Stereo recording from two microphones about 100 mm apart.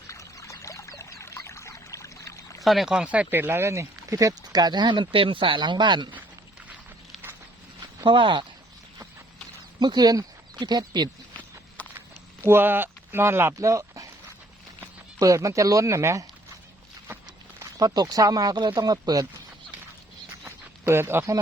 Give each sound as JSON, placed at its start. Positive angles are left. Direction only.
{"t": 0.1, "sound": "pour", "side_deg": 30}
{"t": 2.6, "sound": "speech", "side_deg": -5}
{"t": 8.0, "sound": "speech", "side_deg": -55}
{"t": 9.8, "sound": "speech", "side_deg": -45}
{"t": 11.8, "sound": "a sound", "side_deg": 15}
{"t": 12.5, "sound": "speech", "side_deg": -20}
{"t": 15.2, "sound": "speech", "side_deg": -35}
{"t": 17.6, "sound": "speech", "side_deg": -40}
{"t": 20.4, "sound": "a sound", "side_deg": -25}